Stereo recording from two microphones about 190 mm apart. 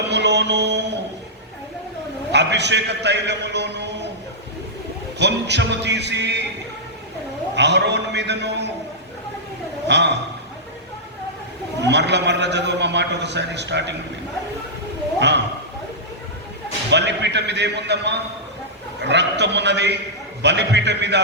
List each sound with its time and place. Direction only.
0.1 s a sound: 65° right (ahead or behind)
2.3 s a man's voice: 65° right (ahead or behind)
5.2 s a man's voice: 65° right (ahead or behind)
7.5 s a man's voice: 65° right (ahead or behind)
9.8 s a man's voice: 65° right (ahead or behind)
11.8 s a man's voice: 65° right (ahead or behind)
16.9 s a man's voice: 65° right (ahead or behind)